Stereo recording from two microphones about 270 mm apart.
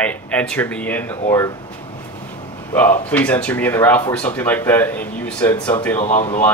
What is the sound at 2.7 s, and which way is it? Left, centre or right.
Speech, centre.